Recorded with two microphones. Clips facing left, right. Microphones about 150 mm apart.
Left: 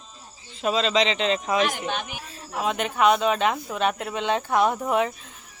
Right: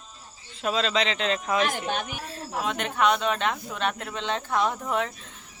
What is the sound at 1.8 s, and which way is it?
Speech, 45° right (ahead or behind).